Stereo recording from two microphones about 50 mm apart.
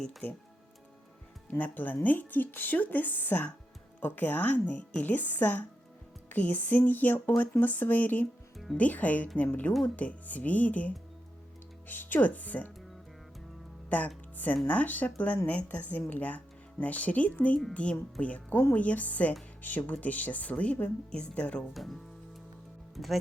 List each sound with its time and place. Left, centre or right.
1.5 s speech: left
8.5 s music: centre
8.8 s speech: left
11.9 s speech: left
13.9 s speech: left
21.7 s speech: centre
23.0 s speech: centre